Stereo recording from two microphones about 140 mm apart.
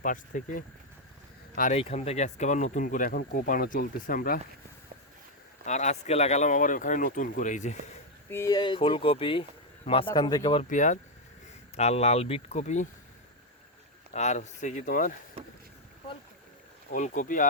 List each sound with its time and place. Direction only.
0.0 s speech: 70° left (ahead or behind)
1.8 s speech: 45° left (ahead or behind); by 4.4 s 85° left
5.6 s speech: 55° left (ahead or behind)
8.3 s speech: 20° left (ahead or behind)
8.5 s speech: 35° left (ahead or behind)
10.6 s speech: 65° left (ahead or behind)
11.8 s speech: 50° left (ahead or behind)
14.1 s speech: 55° left (ahead or behind)
16.9 s speech: 65° left (ahead or behind)